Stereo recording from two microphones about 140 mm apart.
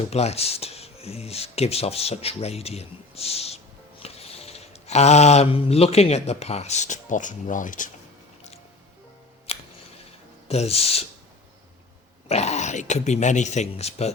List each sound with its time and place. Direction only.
0.1 s speech: 50° left (ahead or behind); by 7.9 s 70° left (ahead or behind)
9.5 s a sound: 45° left (ahead or behind)
10.5 s speech: 50° left (ahead or behind)
12.3 s speech: 50° left (ahead or behind)